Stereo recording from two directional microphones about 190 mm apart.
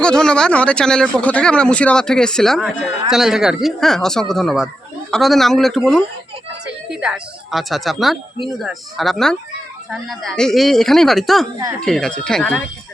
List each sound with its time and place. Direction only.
0.0 s speech: 5° left (ahead or behind)